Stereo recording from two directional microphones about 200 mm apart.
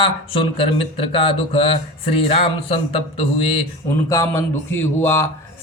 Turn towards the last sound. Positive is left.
turn(degrees=10)  # may be behind; listen again after turning